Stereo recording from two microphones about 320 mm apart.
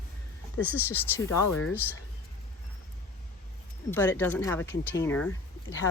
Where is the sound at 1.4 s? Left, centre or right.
Left.